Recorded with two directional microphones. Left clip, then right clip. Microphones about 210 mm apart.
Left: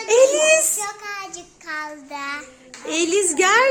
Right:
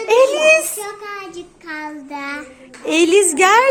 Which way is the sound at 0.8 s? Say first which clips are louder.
Right 1 dB; 20° left (ahead or behind).